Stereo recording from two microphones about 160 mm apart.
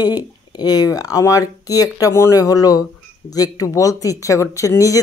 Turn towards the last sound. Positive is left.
turn(degrees=20)  # may be behind; listen again after turning